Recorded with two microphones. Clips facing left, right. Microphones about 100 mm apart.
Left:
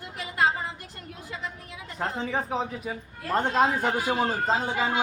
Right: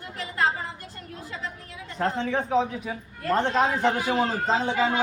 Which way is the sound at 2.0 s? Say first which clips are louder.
Right 3 dB; 5° left (ahead or behind).